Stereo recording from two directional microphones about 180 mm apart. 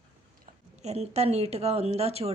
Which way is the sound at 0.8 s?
35° right (ahead or behind).